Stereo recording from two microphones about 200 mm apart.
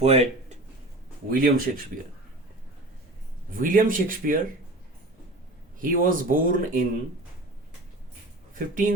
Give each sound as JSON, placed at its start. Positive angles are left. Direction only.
{"t": 0.0, "sound": "a sound", "side_deg": -30}
{"t": 1.3, "sound": "speech", "side_deg": -45}
{"t": 3.5, "sound": "speech", "side_deg": -45}
{"t": 5.8, "sound": "speech", "side_deg": -45}
{"t": 8.5, "sound": "speech", "side_deg": -45}